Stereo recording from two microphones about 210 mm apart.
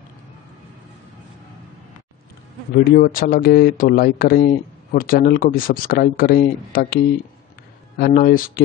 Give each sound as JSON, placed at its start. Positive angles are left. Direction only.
{"t": 2.8, "sound": "speech", "side_deg": 45}
{"t": 8.0, "sound": "speech", "side_deg": 45}